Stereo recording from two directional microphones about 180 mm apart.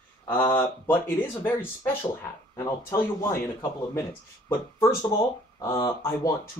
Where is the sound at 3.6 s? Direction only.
15° left (ahead or behind).